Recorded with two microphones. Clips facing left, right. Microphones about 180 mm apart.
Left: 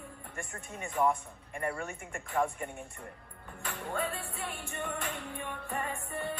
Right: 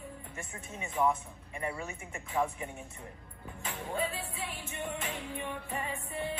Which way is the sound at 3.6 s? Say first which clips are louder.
Even; 60° left (ahead or behind).